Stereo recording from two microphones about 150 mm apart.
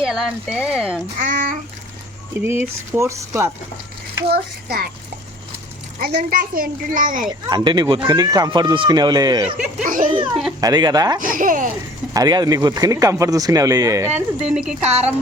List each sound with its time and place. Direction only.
0.0 s speech: 5° right (ahead or behind)
1.2 s a woman's voice: 60° right (ahead or behind)
2.4 s speech: 15° right (ahead or behind)
4.3 s a child's voice: 90° right
6.0 s a woman's voice: 75° right (ahead or behind)
7.5 s speech: 30° right (ahead or behind)
9.8 s a woman's voice: 65° right (ahead or behind)
10.6 s speech: 25° right (ahead or behind)
11.2 s a woman's voice: 65° right (ahead or behind)
12.1 s speech: 25° right (ahead or behind)
14.2 s speech: 5° right (ahead or behind)
14.8 s speech: 45° right (ahead or behind)